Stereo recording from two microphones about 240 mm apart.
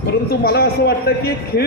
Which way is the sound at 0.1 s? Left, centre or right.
Left.